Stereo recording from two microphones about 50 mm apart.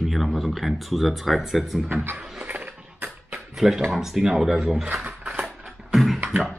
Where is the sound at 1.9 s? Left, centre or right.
Right.